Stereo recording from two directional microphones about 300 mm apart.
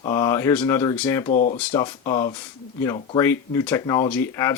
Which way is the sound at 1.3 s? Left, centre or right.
Left.